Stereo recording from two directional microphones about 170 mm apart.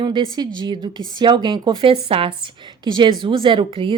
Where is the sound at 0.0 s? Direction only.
25° right (ahead or behind).